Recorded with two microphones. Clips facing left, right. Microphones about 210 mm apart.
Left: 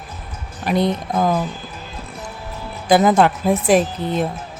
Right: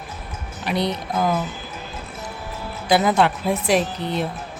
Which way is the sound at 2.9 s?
45° left (ahead or behind).